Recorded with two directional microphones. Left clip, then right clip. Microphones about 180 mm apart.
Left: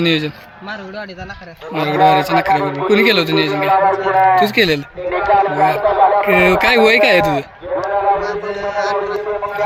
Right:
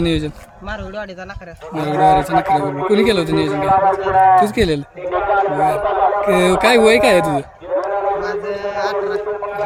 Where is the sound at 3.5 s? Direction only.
55° left (ahead or behind).